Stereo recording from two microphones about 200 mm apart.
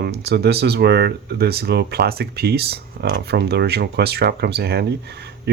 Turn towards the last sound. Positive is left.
turn(degrees=-55)  # may be behind; listen again after turning